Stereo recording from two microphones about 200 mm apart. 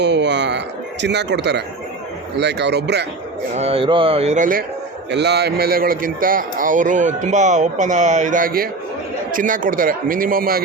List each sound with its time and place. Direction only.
0.0 s a sound: 60° right (ahead or behind)
1.0 s speech: 60° right (ahead or behind)
3.5 s speech: 30° right (ahead or behind)
5.1 s a man's voice: 55° right (ahead or behind)